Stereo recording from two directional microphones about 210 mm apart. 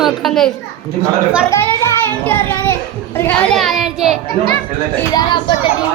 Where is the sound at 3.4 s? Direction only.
Centre (ahead or behind).